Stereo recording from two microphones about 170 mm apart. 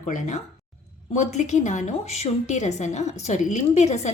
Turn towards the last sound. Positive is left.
turn(degrees=40)  # may be behind; listen again after turning